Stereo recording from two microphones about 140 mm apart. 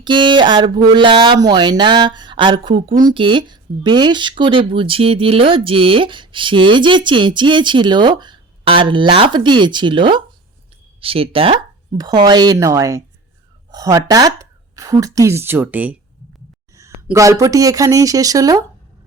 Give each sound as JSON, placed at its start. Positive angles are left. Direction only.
{"t": 0.0, "sound": "speech", "side_deg": -35}
{"t": 11.9, "sound": "speech", "side_deg": -30}
{"t": 16.7, "sound": "speech", "side_deg": -20}